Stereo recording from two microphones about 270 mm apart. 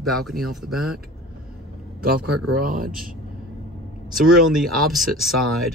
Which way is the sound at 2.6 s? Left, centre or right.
Right.